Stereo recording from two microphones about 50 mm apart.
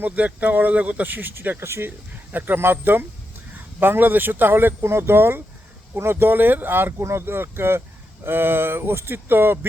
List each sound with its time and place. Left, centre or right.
0.0 s speech: right
1.3 s speech: right
2.3 s speech: right
7.0 s speech: right